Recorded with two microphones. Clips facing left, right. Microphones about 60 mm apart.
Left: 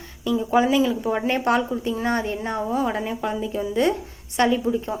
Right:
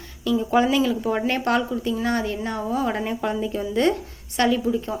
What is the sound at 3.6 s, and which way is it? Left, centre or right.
A woman's voice, centre.